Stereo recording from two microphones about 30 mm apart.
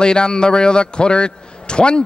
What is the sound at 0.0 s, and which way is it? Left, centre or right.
A man's voice, left.